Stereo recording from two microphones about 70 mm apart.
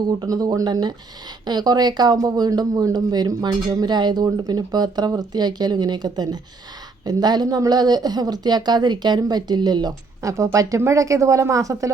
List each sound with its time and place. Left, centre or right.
0.0 s speech: right
4.4 s speech: right
10.2 s speech: right